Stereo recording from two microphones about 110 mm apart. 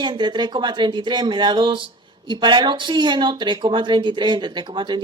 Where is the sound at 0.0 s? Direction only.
45° right (ahead or behind).